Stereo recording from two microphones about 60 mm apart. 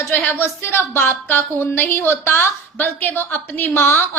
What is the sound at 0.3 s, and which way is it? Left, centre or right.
A woman's voice, left.